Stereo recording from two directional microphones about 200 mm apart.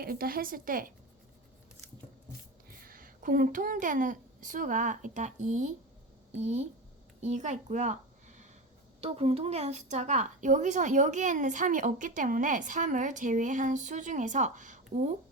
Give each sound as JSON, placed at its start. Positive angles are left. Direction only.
{"t": 0.0, "sound": "a woman's voice", "side_deg": -45}
{"t": 2.6, "sound": "a woman's voice", "side_deg": -45}